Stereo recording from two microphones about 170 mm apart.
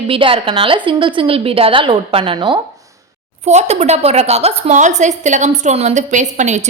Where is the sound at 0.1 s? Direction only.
30° right (ahead or behind).